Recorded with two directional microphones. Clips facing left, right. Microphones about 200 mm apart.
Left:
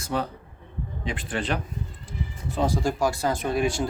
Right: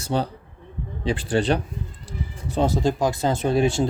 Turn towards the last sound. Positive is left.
turn(degrees=-25)  # may be behind; listen again after turning